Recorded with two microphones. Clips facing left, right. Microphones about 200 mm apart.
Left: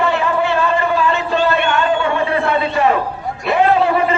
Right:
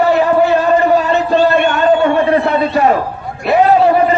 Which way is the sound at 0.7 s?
40° right (ahead or behind).